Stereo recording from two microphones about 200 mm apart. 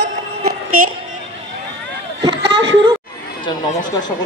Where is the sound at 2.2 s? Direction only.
25° right (ahead or behind).